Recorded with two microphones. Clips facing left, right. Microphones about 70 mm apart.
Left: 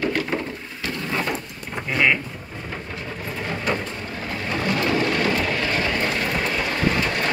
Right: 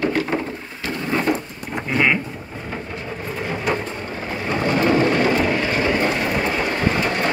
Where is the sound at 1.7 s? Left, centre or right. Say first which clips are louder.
Right 1 dB; centre.